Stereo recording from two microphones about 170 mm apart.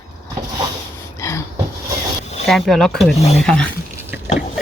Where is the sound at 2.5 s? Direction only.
Centre (ahead or behind).